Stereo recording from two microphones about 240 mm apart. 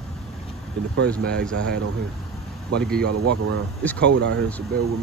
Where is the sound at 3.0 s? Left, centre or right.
Right.